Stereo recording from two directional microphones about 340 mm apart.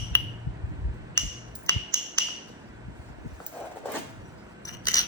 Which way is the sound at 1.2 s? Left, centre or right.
Centre.